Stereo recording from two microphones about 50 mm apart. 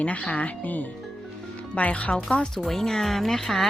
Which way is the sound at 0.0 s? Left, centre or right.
Left.